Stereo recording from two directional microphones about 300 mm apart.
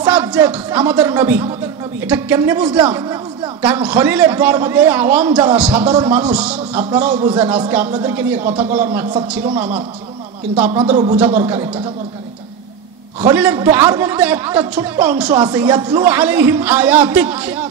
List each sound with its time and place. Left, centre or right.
0.0 s a man's voice: centre
10.6 s a man's voice: centre
11.3 s a man's voice: centre
13.2 s a man's voice: centre